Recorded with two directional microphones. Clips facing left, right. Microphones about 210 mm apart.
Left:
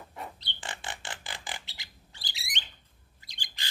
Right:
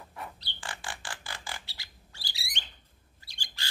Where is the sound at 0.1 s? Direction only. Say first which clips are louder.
Even; 25° left (ahead or behind).